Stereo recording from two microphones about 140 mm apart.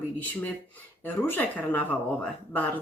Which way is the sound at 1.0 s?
15° left (ahead or behind).